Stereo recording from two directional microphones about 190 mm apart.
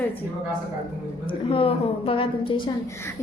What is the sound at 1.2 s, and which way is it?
A woman's voice, 30° left (ahead or behind).